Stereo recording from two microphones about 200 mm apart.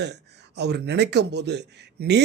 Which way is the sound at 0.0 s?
55° right (ahead or behind).